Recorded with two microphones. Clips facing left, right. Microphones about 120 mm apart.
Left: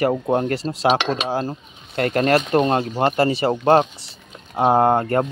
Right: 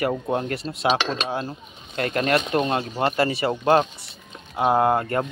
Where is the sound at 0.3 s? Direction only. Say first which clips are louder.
Left 5 dB; 30° left (ahead or behind).